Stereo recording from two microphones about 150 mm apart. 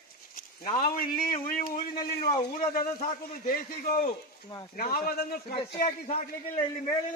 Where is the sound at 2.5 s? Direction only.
70° left (ahead or behind); by 5.5 s 90° left.